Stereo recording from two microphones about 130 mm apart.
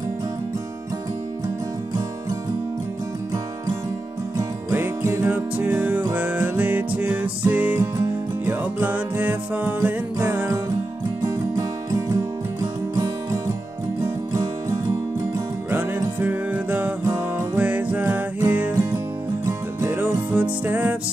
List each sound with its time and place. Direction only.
4.4 s music: 20° right (ahead or behind)
11.2 s music: 30° right (ahead or behind)
15.7 s music: 15° right (ahead or behind)